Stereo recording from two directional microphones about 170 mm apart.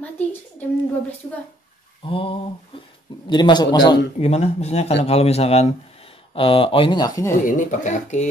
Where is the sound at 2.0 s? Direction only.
30° left (ahead or behind).